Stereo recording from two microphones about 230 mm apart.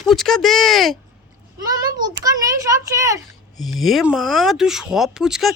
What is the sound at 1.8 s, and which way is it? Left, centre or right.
Speech, centre.